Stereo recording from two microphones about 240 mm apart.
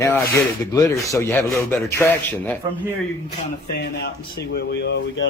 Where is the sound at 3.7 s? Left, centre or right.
Left.